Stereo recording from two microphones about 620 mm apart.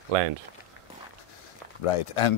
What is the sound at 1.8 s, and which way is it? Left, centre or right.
Speech, left.